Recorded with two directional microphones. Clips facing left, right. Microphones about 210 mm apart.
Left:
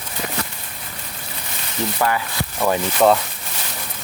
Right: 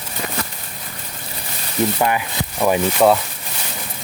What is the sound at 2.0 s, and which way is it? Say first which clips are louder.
Rub: right 2 dB; 20° right (ahead or behind).